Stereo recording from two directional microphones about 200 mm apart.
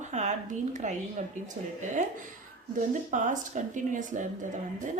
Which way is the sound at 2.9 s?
40° right (ahead or behind).